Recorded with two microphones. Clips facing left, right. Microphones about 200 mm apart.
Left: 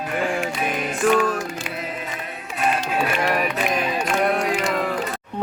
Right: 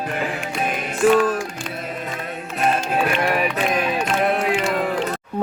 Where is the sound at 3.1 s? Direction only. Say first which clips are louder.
Right 1 dB; centre (ahead or behind).